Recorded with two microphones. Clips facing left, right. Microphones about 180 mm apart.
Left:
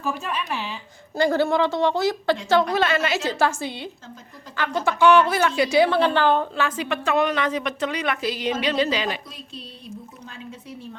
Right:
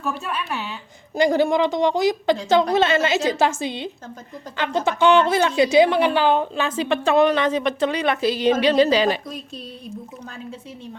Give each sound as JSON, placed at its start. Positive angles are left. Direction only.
{"t": 0.2, "sound": "a woman's voice", "side_deg": -5}
{"t": 1.1, "sound": "a woman's voice", "side_deg": -15}